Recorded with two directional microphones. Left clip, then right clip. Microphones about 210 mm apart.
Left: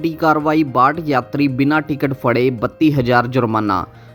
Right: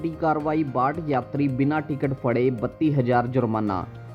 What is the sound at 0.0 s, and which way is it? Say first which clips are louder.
Speech: left 8 dB; 35° left (ahead or behind).